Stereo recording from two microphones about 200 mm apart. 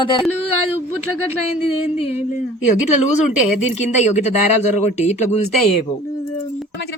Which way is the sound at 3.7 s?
35° left (ahead or behind).